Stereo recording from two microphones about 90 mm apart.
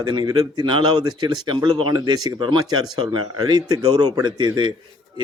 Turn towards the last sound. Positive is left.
turn(degrees=-50)  # may be behind; listen again after turning